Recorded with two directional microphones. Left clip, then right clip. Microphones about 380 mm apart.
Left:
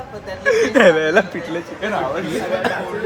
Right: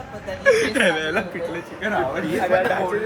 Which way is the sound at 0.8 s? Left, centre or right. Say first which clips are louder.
Left 7 dB; left.